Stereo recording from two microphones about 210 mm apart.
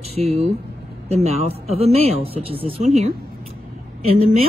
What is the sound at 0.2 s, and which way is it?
Speech, 30° right (ahead or behind).